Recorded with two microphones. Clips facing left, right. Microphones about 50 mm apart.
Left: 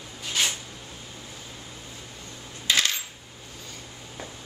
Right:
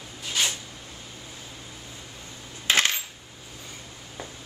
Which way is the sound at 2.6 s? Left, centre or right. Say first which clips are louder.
Right 2 dB; right.